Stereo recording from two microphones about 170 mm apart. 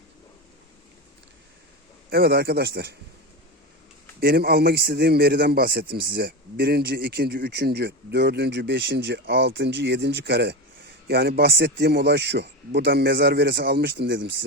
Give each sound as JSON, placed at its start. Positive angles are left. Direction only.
{"t": 2.0, "sound": "a man's voice", "side_deg": -65}
{"t": 4.2, "sound": "a man's voice", "side_deg": -65}